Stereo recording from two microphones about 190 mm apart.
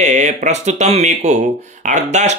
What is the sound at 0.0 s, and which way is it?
Speech, 40° right (ahead or behind).